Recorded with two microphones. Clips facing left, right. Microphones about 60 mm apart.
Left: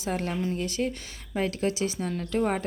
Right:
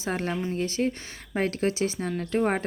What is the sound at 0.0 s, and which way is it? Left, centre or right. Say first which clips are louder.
Speech: even; right.